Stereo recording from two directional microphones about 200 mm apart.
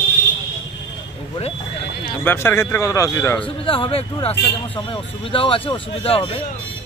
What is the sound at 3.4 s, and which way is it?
Speech, 25° left (ahead or behind).